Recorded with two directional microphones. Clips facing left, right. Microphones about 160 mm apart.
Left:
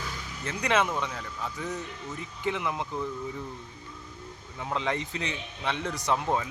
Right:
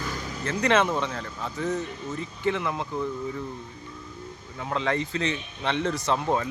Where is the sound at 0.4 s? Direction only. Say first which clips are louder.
Right 4 dB; 10° left (ahead or behind).